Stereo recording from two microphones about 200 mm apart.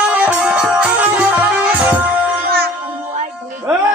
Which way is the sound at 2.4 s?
50° right (ahead or behind).